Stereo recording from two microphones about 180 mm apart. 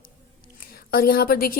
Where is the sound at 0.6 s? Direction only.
55° left (ahead or behind).